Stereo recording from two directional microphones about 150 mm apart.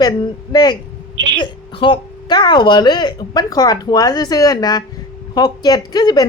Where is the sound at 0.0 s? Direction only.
30° left (ahead or behind).